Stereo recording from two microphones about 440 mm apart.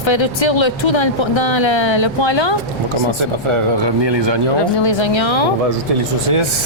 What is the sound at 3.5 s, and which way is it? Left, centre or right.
Speech, right.